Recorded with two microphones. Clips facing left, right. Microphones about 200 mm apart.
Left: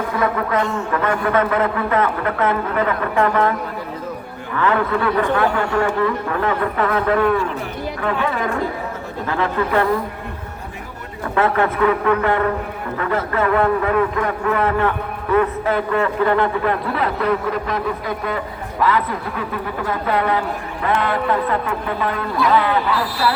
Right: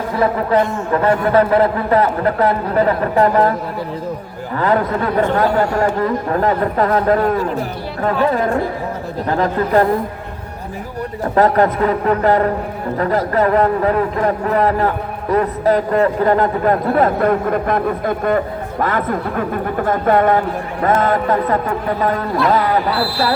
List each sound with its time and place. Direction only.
0.2 s a man's voice: 30° right (ahead or behind)
4.5 s a man's voice: 40° right (ahead or behind)
11.3 s a man's voice: 40° right (ahead or behind)